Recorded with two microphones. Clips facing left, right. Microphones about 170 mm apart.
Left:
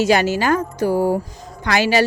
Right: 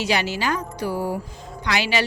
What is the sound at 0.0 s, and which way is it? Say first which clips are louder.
A woman's voice: left 7 dB; 45° left (ahead or behind).